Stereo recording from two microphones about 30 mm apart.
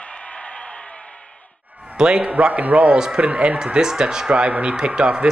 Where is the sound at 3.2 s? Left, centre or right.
Right.